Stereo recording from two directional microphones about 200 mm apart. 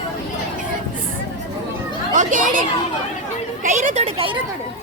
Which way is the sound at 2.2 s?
40° right (ahead or behind).